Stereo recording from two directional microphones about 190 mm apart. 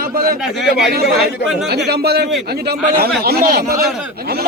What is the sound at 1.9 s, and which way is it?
Speech, 55° right (ahead or behind).